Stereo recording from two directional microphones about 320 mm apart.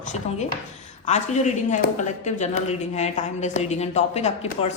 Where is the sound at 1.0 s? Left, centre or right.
Left.